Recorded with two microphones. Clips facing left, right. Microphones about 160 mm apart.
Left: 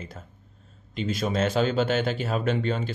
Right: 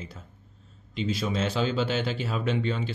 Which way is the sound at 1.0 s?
50° left (ahead or behind).